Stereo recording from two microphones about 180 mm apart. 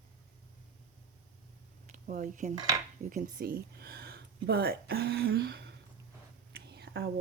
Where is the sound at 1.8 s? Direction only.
45° right (ahead or behind).